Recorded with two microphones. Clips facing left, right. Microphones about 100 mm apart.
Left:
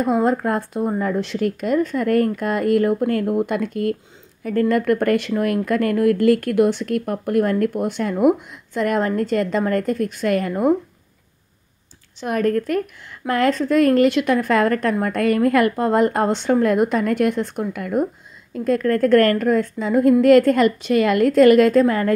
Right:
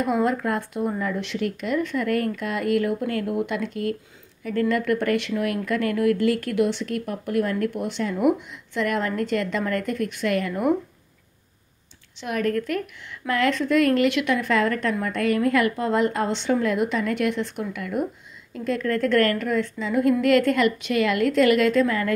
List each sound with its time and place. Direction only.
0.0 s speech: 30° left (ahead or behind)
12.2 s speech: 40° left (ahead or behind)